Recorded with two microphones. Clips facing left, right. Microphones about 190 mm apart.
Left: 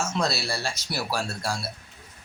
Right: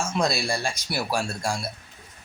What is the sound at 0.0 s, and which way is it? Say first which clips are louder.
Speech: right 2 dB; 15° right (ahead or behind).